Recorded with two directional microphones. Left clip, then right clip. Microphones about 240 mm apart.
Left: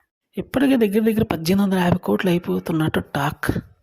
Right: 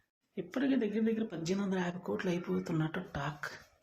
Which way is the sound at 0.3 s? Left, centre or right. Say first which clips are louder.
Left 15 dB; left.